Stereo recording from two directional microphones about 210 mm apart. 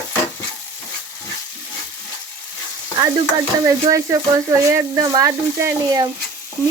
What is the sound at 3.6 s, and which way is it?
Frying, 15° right (ahead or behind).